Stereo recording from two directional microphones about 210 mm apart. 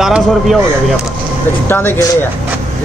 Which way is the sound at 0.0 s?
Centre (ahead or behind).